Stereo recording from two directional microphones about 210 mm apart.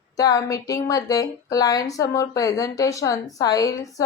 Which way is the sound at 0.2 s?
15° left (ahead or behind).